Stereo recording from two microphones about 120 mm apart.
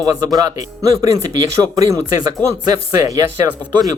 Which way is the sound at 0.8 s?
30° right (ahead or behind).